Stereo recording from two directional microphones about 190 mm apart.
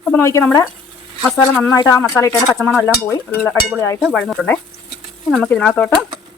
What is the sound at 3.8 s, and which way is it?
Speech, 15° left (ahead or behind).